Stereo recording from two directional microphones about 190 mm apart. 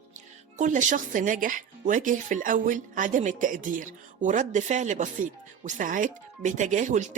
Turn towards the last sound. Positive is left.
turn(degrees=-40)  # may be behind; listen again after turning